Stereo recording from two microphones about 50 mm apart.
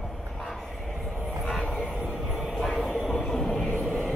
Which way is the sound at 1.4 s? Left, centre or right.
Centre.